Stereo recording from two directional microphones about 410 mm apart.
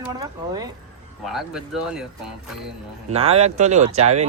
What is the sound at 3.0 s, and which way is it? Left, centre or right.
Speech, centre.